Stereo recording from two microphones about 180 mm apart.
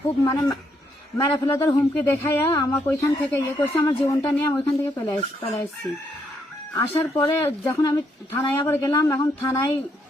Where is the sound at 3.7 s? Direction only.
25° left (ahead or behind).